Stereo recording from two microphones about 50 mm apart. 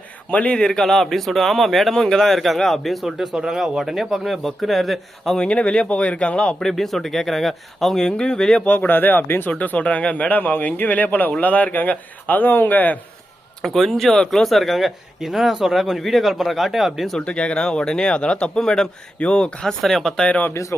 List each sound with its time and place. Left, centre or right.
0.3 s speech: left
0.7 s speech: centre
5.4 s speech: left
6.6 s speech: centre
7.9 s speech: centre
8.6 s speech: left
9.5 s speech: left
13.6 s speech: centre
17.2 s speech: centre
19.8 s speech: centre
20.5 s speech: left